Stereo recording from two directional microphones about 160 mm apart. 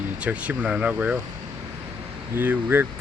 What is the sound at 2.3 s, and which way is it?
Speech, 10° right (ahead or behind).